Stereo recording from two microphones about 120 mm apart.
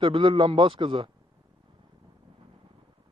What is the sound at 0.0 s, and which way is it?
A man's voice, 45° right (ahead or behind).